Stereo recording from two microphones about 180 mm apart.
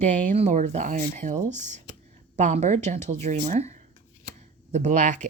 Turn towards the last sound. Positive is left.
turn(degrees=-45)  # may be behind; listen again after turning